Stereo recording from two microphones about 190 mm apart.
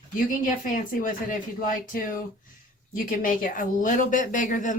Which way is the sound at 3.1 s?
45° left (ahead or behind).